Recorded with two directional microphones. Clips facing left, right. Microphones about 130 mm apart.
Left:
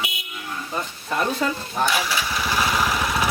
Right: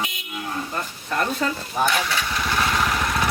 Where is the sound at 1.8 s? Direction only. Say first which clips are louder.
Even; 5° left (ahead or behind).